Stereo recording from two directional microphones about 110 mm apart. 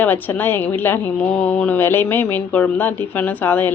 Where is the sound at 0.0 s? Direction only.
15° left (ahead or behind).